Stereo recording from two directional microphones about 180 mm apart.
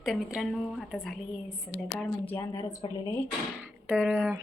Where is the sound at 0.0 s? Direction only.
5° right (ahead or behind).